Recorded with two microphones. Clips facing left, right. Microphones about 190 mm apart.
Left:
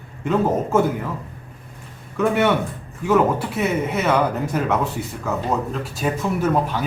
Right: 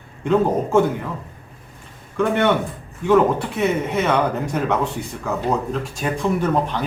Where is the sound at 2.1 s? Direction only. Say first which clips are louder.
Even; 5° left (ahead or behind).